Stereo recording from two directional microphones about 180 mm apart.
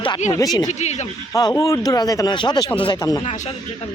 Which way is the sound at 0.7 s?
40° left (ahead or behind).